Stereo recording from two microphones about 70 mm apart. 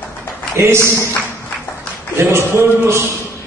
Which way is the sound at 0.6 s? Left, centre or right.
Right.